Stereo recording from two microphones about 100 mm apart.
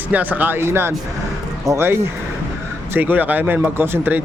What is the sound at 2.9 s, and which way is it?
Speech, 20° right (ahead or behind).